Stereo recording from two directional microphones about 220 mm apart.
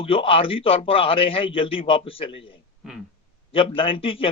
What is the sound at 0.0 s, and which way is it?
A man's voice, 25° left (ahead or behind).